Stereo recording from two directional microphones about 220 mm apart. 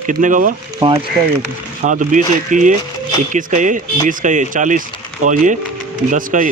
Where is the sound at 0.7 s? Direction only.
20° right (ahead or behind).